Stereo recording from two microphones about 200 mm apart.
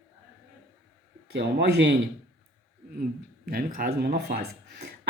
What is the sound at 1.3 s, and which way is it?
Speech, 55° right (ahead or behind).